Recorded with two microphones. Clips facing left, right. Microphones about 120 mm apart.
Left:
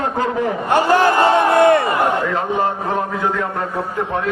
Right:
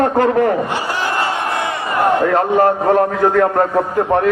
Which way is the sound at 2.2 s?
55° right (ahead or behind).